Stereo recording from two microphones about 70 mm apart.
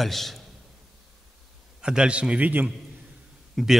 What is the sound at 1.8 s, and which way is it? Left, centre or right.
Speech, centre.